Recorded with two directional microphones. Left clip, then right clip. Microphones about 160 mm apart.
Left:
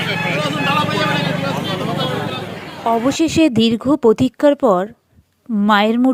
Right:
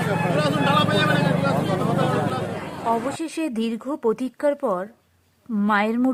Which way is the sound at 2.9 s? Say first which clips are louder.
Left 9 dB; 35° left (ahead or behind).